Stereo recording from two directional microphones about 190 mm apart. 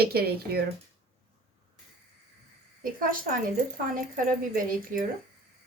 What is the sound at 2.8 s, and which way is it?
Speech, 45° right (ahead or behind).